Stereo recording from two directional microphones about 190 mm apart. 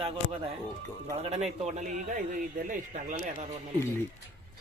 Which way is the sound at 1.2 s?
35° right (ahead or behind).